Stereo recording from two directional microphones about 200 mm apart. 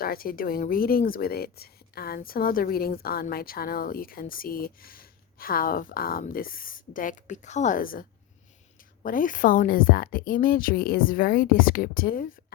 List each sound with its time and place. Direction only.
0.0 s speech: 50° left (ahead or behind)
9.0 s speech: 40° left (ahead or behind)